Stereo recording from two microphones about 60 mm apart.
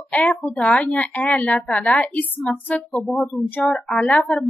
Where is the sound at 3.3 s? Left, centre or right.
Left.